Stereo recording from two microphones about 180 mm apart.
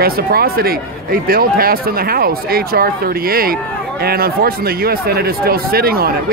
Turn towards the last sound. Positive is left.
turn(degrees=-55)  # may be behind; listen again after turning